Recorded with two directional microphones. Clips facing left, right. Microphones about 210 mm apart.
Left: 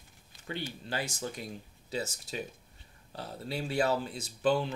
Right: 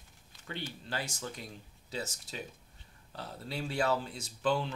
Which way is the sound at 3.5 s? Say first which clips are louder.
Left 2 dB; 10° left (ahead or behind).